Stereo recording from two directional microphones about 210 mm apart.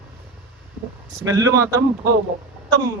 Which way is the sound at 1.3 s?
15° right (ahead or behind).